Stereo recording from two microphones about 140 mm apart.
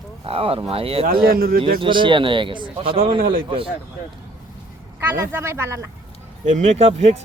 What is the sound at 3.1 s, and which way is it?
Speech, 85° right.